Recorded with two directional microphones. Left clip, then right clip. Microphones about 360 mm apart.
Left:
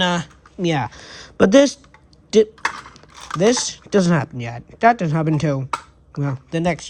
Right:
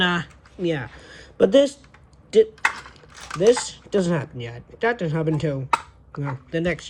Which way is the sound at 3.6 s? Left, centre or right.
Centre.